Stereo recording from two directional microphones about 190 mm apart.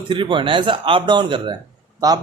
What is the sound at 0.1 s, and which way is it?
A man's voice, 25° right (ahead or behind).